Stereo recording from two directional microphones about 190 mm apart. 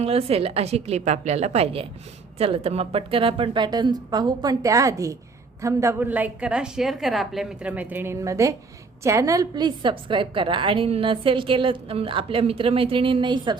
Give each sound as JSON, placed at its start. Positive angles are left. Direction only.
{"t": 0.0, "sound": "a woman's voice", "side_deg": -30}